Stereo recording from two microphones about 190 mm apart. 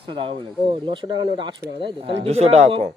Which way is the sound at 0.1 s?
25° right (ahead or behind).